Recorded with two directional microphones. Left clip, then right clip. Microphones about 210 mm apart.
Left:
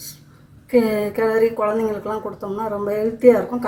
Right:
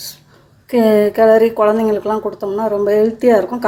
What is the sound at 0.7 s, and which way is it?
A woman's voice, 50° right (ahead or behind).